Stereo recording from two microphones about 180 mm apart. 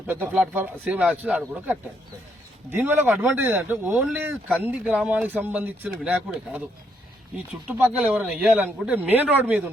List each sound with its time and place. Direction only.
0.1 s speech: 10° right (ahead or behind)